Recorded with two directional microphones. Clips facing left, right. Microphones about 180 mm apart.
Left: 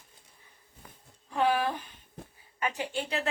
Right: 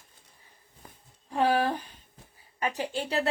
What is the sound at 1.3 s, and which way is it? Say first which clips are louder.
Speech: right 2 dB; 35° right (ahead or behind).